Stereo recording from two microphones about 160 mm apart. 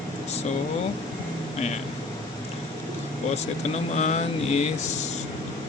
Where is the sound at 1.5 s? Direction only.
45° left (ahead or behind).